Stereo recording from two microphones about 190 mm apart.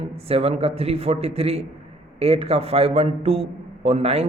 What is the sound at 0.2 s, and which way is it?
A man's voice, 30° right (ahead or behind).